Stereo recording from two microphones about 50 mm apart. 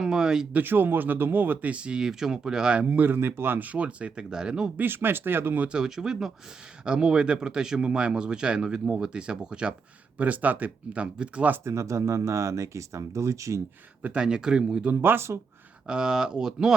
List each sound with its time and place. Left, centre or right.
0.0 s a sound: centre
0.5 s speech: right
1.7 s speech: right
2.8 s speech: right
3.2 s speech: right; by 4.7 s centre
4.8 s speech: right
5.6 s speech: centre
10.2 s speech: right
11.0 s speech: right
11.6 s speech: right
14.0 s speech: right
15.0 s speech: right
15.9 s speech: centre